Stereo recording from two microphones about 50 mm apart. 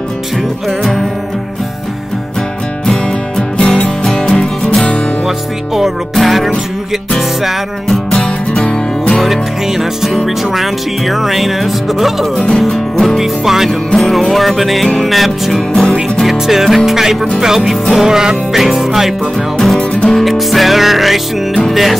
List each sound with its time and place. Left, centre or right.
2.9 s music: centre
6.1 s music: centre
9.2 s music: centre
13.2 s music: centre
13.9 s music: centre
16.3 s music: centre
19.8 s music: left
20.2 s music: centre